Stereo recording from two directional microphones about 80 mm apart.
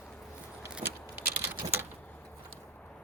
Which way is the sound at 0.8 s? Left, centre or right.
Right.